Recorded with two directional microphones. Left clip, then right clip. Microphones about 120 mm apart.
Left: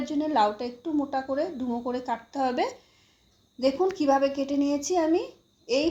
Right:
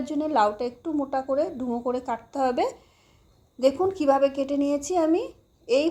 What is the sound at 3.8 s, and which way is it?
A woman's voice, 25° right (ahead or behind).